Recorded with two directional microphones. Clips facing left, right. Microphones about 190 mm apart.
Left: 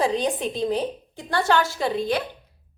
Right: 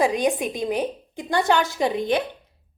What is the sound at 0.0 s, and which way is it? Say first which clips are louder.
A woman's voice: right 2 dB; 15° right (ahead or behind).